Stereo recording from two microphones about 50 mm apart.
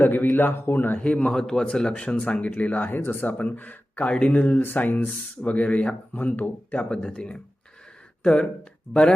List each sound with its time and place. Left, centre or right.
0.0 s a man's voice: left
0.9 s speech: left
1.3 s speech: centre; by 4.6 s left
4.6 s speech: left
6.1 s speech: left
6.9 s speech: centre